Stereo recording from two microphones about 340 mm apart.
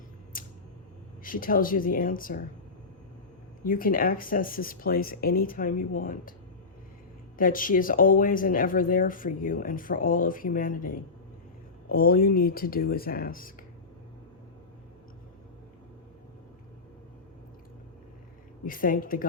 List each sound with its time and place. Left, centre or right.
0.3 s a sound: left
1.2 s speech: left
3.7 s speech: left
7.3 s speech: left
18.6 s speech: left